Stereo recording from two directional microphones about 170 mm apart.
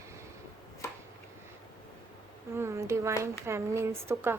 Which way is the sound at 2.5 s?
15° right (ahead or behind).